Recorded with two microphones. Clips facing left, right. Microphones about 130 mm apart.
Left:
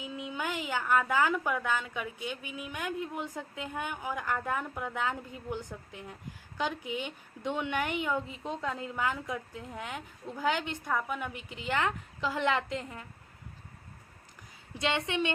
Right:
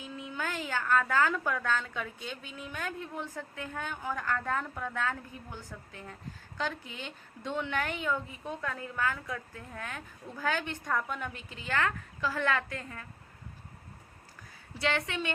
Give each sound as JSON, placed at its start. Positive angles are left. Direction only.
{"t": 0.0, "sound": "a woman's voice", "side_deg": 15}
{"t": 14.8, "sound": "a woman's voice", "side_deg": 20}